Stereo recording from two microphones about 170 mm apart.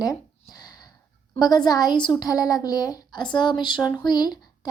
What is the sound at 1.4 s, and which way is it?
A child's voice, 25° left (ahead or behind).